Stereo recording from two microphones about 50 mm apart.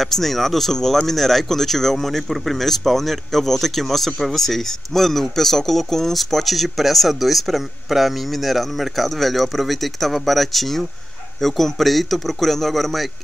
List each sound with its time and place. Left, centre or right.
0.0 s speech: centre